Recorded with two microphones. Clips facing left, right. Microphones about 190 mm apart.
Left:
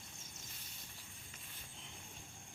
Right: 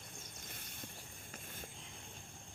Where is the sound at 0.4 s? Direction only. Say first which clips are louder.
Right 7 dB; 55° right (ahead or behind).